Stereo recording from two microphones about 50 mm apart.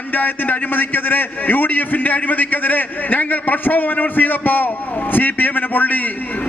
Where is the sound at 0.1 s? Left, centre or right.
Left.